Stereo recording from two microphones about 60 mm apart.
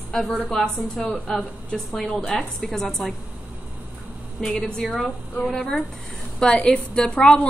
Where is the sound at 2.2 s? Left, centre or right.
Left.